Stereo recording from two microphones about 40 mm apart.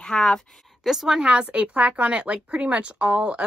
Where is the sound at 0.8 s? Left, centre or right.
Centre.